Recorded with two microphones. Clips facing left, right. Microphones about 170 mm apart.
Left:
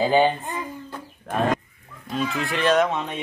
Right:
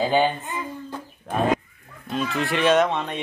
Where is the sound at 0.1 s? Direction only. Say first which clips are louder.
Left 2 dB; 5° left (ahead or behind).